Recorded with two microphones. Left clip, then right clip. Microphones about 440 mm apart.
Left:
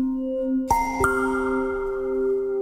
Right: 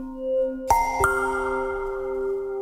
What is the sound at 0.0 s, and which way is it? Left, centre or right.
Music, right.